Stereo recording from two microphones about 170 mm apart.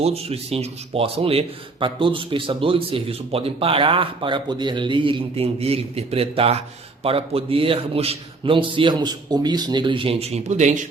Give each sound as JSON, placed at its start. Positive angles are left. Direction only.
{"t": 0.0, "sound": "speech", "side_deg": -35}